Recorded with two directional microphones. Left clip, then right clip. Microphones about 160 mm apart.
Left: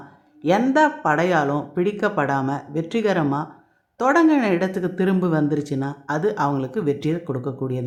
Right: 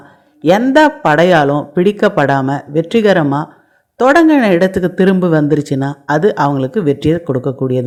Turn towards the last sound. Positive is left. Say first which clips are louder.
# right 11 dB
turn(degrees=-35)  # may be behind; listen again after turning